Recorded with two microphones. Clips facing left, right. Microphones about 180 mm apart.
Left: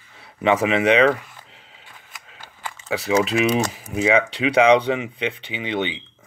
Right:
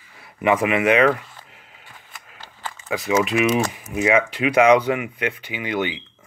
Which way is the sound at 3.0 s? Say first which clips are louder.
Even; 35° left (ahead or behind).